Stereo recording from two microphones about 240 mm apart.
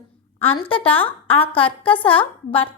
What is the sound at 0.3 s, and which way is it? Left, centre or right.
A woman's voice, left.